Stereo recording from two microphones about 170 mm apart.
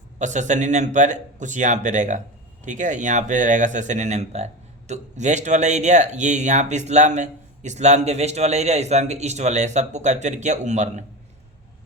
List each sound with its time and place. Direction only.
0.2 s speech: 45° right (ahead or behind)